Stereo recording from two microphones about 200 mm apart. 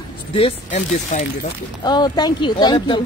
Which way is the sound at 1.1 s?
35° left (ahead or behind).